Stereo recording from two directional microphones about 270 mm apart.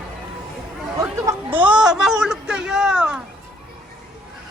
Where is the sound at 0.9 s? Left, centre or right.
Centre.